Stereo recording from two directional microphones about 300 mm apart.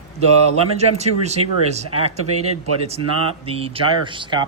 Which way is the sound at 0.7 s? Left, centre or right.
Right.